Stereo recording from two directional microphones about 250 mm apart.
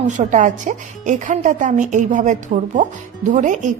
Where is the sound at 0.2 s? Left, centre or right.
Right.